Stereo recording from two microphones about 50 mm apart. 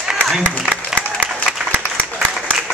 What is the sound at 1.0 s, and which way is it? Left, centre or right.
Applause, left.